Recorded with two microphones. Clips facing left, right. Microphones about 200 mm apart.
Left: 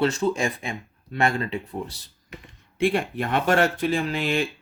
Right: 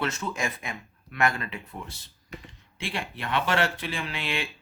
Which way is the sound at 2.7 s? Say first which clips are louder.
Left 12 dB; 50° left (ahead or behind).